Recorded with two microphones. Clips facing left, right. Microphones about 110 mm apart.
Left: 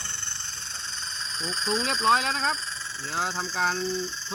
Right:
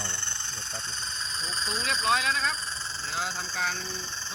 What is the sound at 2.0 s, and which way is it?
Speech, 35° left (ahead or behind).